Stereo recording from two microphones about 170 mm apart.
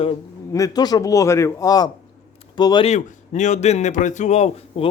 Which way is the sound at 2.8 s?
45° left (ahead or behind).